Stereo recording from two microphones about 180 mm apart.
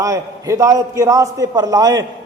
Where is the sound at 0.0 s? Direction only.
20° right (ahead or behind).